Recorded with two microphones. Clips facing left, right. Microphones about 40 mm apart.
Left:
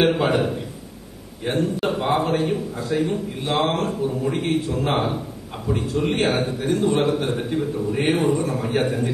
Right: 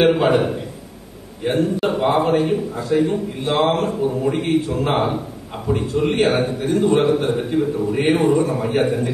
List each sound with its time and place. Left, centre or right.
0.0 s a man's voice: centre
3.8 s a man's voice: centre
7.3 s a man's voice: centre
8.2 s a man's voice: right
8.5 s a man's voice: centre